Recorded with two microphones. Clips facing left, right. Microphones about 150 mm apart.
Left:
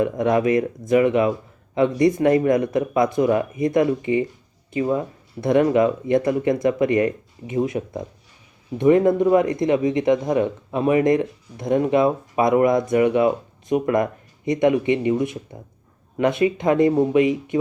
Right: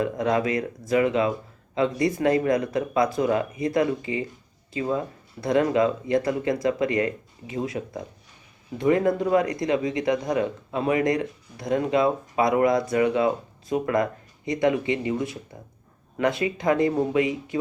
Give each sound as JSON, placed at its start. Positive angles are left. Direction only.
{"t": 0.0, "sound": "speech", "side_deg": 20}